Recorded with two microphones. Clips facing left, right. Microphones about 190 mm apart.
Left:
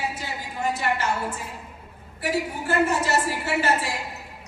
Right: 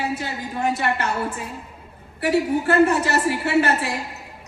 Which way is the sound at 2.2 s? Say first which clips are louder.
Right 7 dB; 60° right (ahead or behind).